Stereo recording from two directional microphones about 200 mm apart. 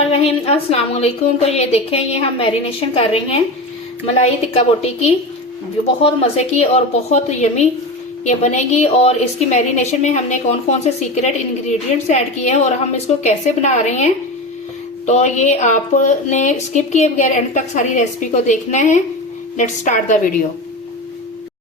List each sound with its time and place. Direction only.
0.1 s a woman's voice: 30° left (ahead or behind)
4.5 s a woman's voice: 30° left (ahead or behind)